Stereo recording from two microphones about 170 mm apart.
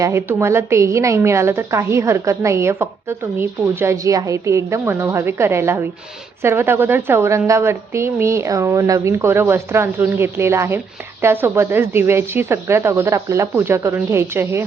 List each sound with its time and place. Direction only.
0.0 s a woman's voice: 15° right (ahead or behind)